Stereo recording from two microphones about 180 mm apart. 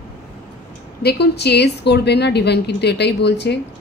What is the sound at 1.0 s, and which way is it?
A woman's voice, 65° left (ahead or behind).